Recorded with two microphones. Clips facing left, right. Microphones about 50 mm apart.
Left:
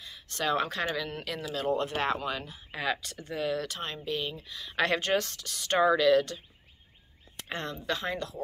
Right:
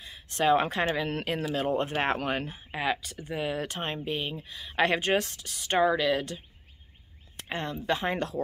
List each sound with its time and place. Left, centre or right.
0.0 s speech: right
2.7 s speech: centre
4.4 s speech: centre
7.4 s speech: centre
7.8 s speech: right
8.1 s speech: right